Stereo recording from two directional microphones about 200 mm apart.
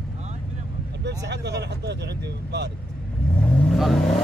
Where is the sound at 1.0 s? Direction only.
60° right (ahead or behind).